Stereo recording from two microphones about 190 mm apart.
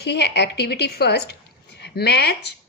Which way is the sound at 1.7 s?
60° left (ahead or behind).